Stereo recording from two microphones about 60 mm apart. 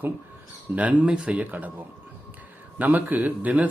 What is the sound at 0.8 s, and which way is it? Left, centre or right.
Speech, right.